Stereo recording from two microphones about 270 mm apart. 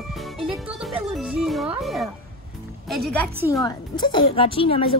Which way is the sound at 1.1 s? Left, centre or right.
Centre.